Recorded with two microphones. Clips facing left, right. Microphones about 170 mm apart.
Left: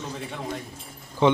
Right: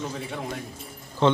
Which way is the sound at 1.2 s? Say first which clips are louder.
Left 1 dB; 15° left (ahead or behind).